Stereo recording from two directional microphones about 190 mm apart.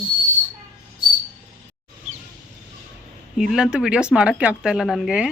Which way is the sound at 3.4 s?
5° right (ahead or behind).